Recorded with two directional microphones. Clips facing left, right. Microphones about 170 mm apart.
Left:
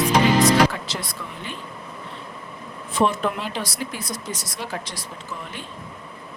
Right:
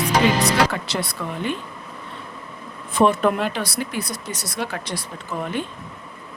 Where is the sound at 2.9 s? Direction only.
55° right (ahead or behind).